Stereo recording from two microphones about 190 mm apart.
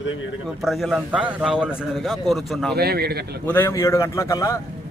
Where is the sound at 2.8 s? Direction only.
55° right (ahead or behind).